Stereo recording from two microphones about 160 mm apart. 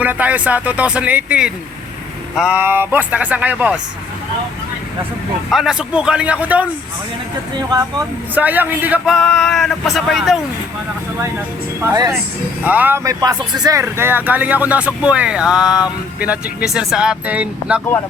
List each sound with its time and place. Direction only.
0.0 s speech: 10° right (ahead or behind)
5.5 s speech: centre (ahead or behind)
7.7 s speech: 25° right (ahead or behind)
8.4 s speech: 10° right (ahead or behind)
9.1 s speech: centre (ahead or behind)
11.8 s speech: 20° right (ahead or behind)